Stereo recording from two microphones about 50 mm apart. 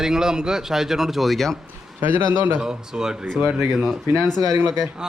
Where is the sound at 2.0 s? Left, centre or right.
Right.